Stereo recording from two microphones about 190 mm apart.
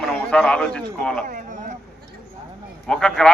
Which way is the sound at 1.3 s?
40° right (ahead or behind).